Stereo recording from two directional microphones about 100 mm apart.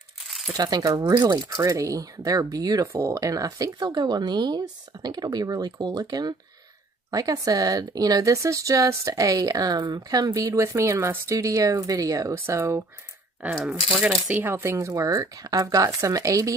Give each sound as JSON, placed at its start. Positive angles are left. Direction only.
{"t": 0.6, "sound": "speech", "side_deg": -40}
{"t": 13.9, "sound": "speech", "side_deg": -5}
{"t": 14.3, "sound": "speech", "side_deg": -25}